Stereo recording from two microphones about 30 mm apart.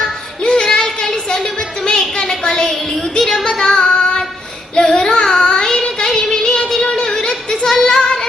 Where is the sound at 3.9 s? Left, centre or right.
Left.